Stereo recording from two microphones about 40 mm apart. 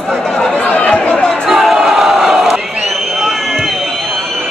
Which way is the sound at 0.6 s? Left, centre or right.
Left.